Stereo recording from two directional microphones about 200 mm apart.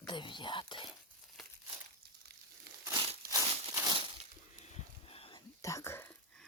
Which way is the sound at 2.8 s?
25° right (ahead or behind).